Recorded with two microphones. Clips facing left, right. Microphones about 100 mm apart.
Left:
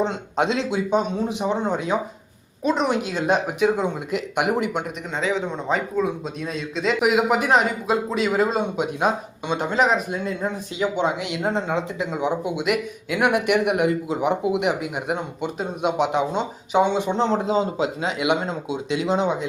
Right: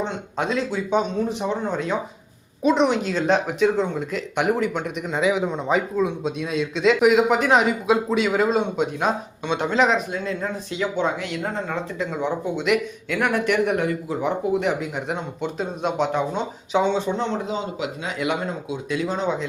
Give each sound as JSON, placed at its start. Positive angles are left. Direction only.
{"t": 0.3, "sound": "speech", "side_deg": 25}
{"t": 2.6, "sound": "speech", "side_deg": 0}
{"t": 5.1, "sound": "a man's voice", "side_deg": -10}
{"t": 17.1, "sound": "a man's voice", "side_deg": 30}